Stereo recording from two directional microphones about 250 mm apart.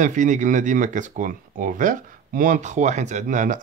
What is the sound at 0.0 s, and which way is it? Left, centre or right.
Speech, right.